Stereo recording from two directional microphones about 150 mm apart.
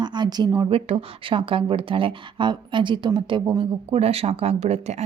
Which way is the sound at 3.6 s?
45° right (ahead or behind).